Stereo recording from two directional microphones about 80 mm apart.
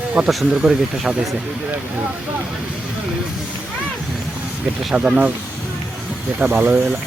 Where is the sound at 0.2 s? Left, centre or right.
Centre.